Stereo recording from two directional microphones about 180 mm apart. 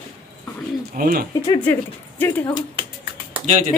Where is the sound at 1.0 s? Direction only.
55° right (ahead or behind).